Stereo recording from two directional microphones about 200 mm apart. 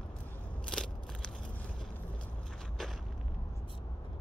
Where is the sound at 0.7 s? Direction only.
5° left (ahead or behind).